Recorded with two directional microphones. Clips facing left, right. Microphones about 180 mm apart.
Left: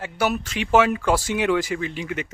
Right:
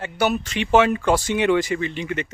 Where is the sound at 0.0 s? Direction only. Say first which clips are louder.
Right 2 dB; 5° left (ahead or behind).